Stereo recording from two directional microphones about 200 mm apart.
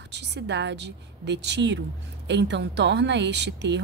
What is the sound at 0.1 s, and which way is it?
A woman's voice, 60° right (ahead or behind).